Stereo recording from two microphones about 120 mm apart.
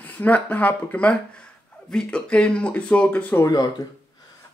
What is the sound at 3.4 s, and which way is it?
Speech, 35° left (ahead or behind).